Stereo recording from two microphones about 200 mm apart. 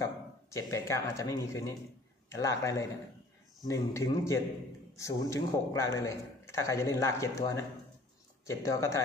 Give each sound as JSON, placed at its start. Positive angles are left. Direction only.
{"t": 0.0, "sound": "a man's voice", "side_deg": 15}